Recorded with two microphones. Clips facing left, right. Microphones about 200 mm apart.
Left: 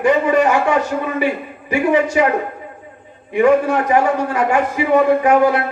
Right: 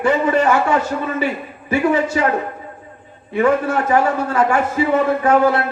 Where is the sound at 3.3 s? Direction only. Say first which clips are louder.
Left 3 dB; 15° left (ahead or behind).